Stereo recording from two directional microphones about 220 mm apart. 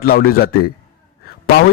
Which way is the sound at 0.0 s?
40° left (ahead or behind).